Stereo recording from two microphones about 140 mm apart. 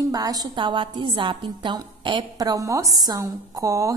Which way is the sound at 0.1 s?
25° right (ahead or behind).